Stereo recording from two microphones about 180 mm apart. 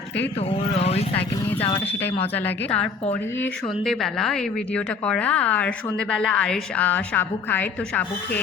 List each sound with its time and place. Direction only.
0.3 s speech: 35° left (ahead or behind)
1.8 s a woman's voice: 10° left (ahead or behind)